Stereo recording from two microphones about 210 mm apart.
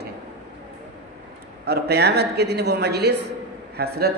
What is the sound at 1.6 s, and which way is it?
Speech, 50° right (ahead or behind).